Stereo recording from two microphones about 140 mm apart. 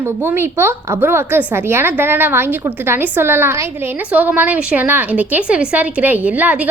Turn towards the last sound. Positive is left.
turn(degrees=-10)  # may be behind; listen again after turning